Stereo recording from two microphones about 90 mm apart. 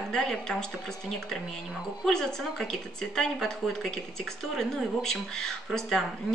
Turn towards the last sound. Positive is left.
turn(degrees=5)  # may be behind; listen again after turning